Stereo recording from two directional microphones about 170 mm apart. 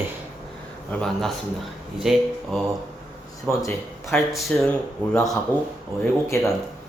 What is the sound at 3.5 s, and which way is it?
Speech, 20° left (ahead or behind).